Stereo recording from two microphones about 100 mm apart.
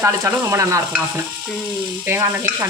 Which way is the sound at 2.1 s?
25° right (ahead or behind).